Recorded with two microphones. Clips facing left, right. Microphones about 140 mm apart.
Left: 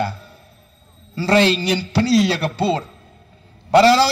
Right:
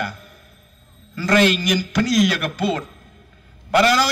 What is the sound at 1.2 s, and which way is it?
A man's voice, 30° left (ahead or behind).